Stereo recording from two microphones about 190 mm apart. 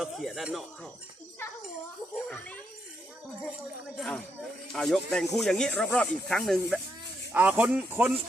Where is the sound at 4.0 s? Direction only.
Centre (ahead or behind).